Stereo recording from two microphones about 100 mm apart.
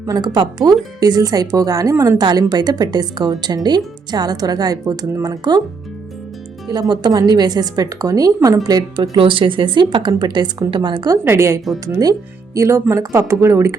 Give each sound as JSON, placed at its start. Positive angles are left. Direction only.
{"t": 0.0, "sound": "a woman's voice", "side_deg": -40}
{"t": 2.2, "sound": "speech", "side_deg": -45}
{"t": 6.7, "sound": "a woman's voice", "side_deg": -45}
{"t": 9.1, "sound": "speech", "side_deg": -60}
{"t": 11.1, "sound": "a woman's voice", "side_deg": -25}